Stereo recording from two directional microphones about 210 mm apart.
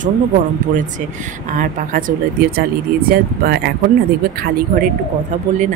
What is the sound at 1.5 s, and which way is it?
A woman's voice, 40° right (ahead or behind).